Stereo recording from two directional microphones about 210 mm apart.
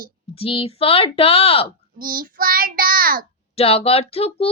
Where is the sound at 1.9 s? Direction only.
45° right (ahead or behind).